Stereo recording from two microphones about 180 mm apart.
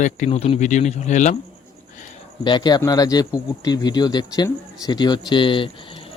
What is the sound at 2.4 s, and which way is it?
A man's voice, 25° left (ahead or behind).